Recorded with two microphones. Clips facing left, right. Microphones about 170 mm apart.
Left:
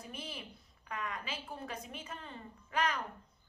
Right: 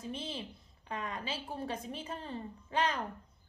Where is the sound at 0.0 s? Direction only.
25° right (ahead or behind).